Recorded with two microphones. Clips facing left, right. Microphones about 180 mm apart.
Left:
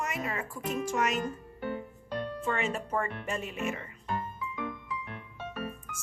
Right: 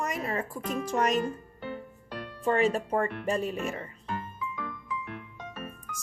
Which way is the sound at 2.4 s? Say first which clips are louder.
Right 10 dB; 35° right (ahead or behind).